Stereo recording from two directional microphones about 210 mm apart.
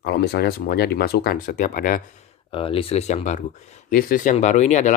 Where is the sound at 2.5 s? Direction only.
25° left (ahead or behind).